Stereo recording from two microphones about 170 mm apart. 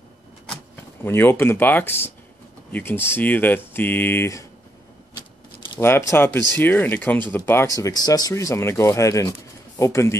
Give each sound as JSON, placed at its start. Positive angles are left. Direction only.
{"t": 1.0, "sound": "speech", "side_deg": 15}
{"t": 5.8, "sound": "speech", "side_deg": 15}